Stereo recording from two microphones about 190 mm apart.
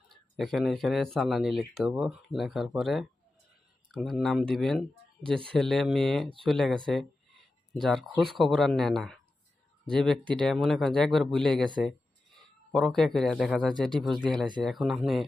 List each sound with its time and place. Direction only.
0.1 s speech: centre (ahead or behind)
12.7 s speech: centre (ahead or behind)